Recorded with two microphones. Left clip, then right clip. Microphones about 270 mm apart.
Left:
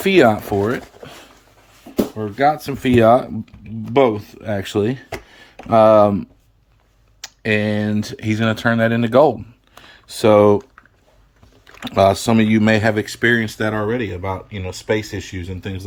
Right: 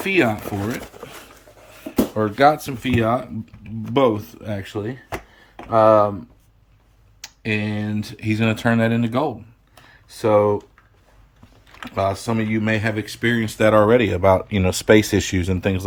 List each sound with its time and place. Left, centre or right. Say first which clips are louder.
0.0 s speech: left 6 dB; left
2.3 s speech: even; centre
2.8 s speech: left 9 dB; left
3.9 s speech: left 3 dB; centre
4.6 s speech: left 9 dB; left
7.2 s speech: left 5 dB; centre
9.8 s speech: left 6 dB; left
11.9 s speech: left 8 dB; left
13.6 s speech: right 6 dB; centre